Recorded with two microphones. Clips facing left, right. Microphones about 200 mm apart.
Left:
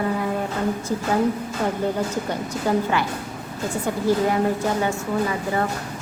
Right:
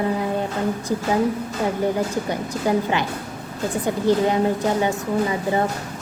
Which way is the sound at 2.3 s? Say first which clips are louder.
Right 1 dB; 15° right (ahead or behind).